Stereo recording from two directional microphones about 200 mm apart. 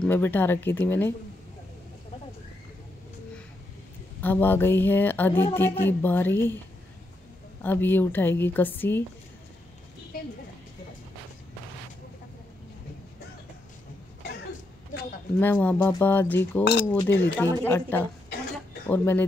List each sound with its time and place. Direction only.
0.0 s speech: 10° left (ahead or behind)
4.2 s speech: 10° left (ahead or behind)
7.6 s speech: 10° left (ahead or behind)
10.1 s a sound: 50° left (ahead or behind)
15.3 s speech: 10° left (ahead or behind)